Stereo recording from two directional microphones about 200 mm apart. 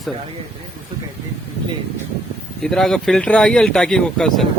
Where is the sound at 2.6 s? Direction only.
Centre (ahead or behind).